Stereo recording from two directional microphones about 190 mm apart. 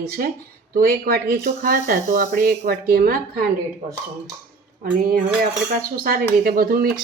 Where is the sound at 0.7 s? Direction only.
50° right (ahead or behind).